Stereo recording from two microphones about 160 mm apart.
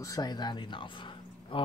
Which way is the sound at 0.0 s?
25° left (ahead or behind).